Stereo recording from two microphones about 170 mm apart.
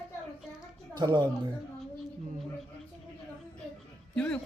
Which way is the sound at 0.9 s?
25° right (ahead or behind).